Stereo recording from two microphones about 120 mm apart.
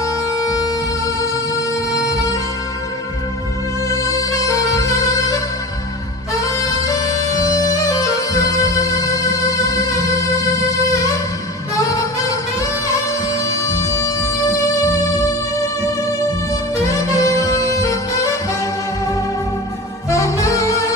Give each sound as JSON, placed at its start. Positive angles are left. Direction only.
{"t": 0.0, "sound": "music", "side_deg": 30}
{"t": 3.9, "sound": "music", "side_deg": 25}
{"t": 6.4, "sound": "bagpipes", "side_deg": 30}
{"t": 13.3, "sound": "music", "side_deg": 25}
{"t": 16.7, "sound": "music", "side_deg": 25}
{"t": 20.1, "sound": "saxophone", "side_deg": 25}